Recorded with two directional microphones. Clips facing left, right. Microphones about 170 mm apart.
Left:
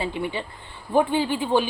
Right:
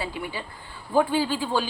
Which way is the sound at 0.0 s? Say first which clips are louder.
Left 4 dB; 25° left (ahead or behind).